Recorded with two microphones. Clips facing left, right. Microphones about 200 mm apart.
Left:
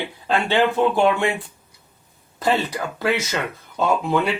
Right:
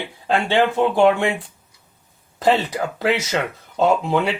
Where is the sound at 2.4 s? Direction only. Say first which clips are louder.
Right 3 dB; 20° right (ahead or behind).